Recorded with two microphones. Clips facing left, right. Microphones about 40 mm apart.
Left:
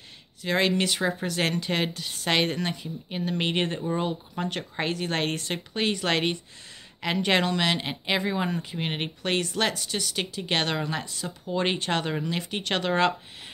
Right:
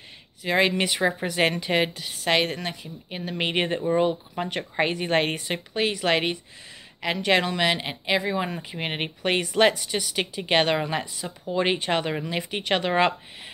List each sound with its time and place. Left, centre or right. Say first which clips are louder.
0.4 s speech: right 2 dB; centre